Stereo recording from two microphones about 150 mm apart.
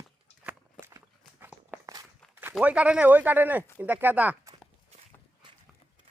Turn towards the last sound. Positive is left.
turn(degrees=-10)  # may be behind; listen again after turning